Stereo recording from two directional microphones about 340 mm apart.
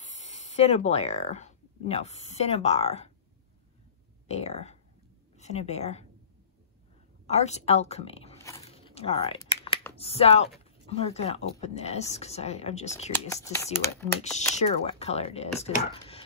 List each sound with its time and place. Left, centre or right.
0.0 s speech: centre
4.3 s speech: centre
7.2 s speech: centre
13.1 s speech: centre
14.5 s speech: centre